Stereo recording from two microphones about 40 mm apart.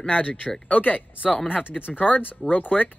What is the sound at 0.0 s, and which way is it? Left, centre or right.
Speech, left.